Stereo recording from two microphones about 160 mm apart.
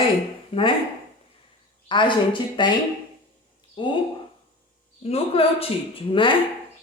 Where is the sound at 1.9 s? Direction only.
30° left (ahead or behind).